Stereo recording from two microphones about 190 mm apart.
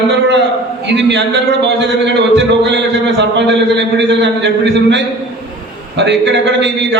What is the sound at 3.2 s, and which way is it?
A man's voice, 65° right (ahead or behind).